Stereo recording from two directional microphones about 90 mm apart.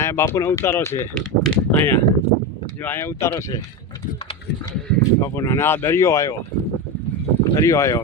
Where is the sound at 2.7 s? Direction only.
20° left (ahead or behind); by 4.3 s 45° left (ahead or behind).